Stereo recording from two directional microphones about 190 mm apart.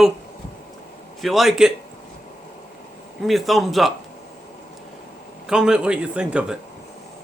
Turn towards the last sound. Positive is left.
turn(degrees=-5)  # may be behind; listen again after turning